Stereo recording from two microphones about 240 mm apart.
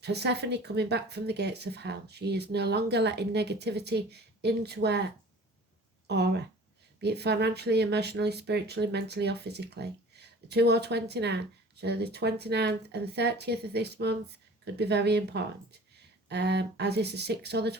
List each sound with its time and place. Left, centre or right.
0.0 s speech: right
6.1 s speech: right